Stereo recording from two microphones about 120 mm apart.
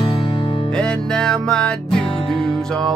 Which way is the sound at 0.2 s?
45° left (ahead or behind).